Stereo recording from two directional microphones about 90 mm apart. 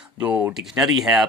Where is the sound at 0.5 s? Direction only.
5° right (ahead or behind).